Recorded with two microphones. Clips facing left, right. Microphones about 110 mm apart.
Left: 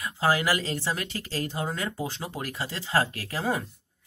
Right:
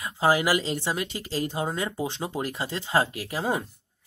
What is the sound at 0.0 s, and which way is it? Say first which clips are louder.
Speech: right 2 dB; 20° right (ahead or behind).